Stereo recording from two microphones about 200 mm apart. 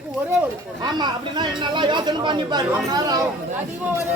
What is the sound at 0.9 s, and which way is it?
Speech, 20° right (ahead or behind).